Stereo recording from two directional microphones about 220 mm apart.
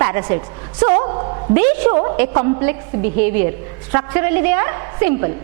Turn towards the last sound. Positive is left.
turn(degrees=-15)  # may be behind; listen again after turning